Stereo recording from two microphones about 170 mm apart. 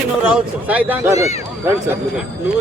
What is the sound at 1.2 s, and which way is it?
Speech, 40° left (ahead or behind).